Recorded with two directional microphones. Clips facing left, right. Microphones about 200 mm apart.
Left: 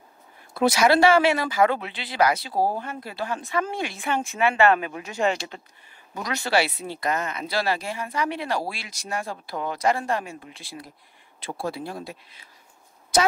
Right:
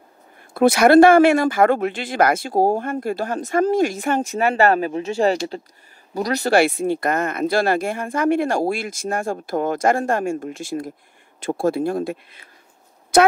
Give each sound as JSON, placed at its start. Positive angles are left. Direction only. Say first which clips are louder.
{"t": 0.6, "sound": "speech", "louder": "right 7 dB", "side_deg": -55}